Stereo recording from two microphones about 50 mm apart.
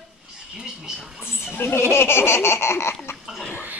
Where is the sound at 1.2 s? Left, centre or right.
Left.